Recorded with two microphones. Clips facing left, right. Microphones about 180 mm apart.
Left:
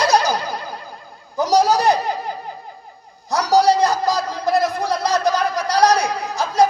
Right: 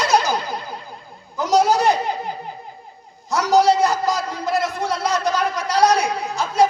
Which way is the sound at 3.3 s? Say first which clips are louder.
Even; 35° left (ahead or behind).